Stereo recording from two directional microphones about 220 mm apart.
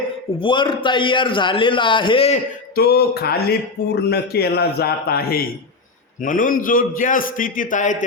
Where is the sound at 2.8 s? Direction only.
45° left (ahead or behind).